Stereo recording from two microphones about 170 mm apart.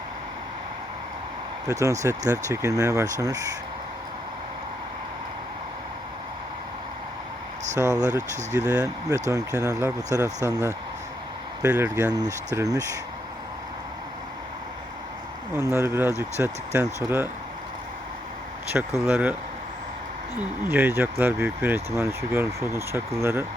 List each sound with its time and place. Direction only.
1.6 s speech: 20° right (ahead or behind)
7.8 s speech: 20° right (ahead or behind)
15.5 s speech: 15° right (ahead or behind)
18.7 s speech: 5° right (ahead or behind)
20.7 s speech: 10° right (ahead or behind)